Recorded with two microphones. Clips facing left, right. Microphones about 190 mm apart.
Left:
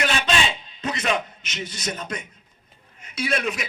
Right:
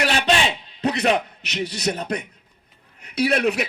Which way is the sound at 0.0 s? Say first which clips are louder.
Right 3 dB; 65° right (ahead or behind).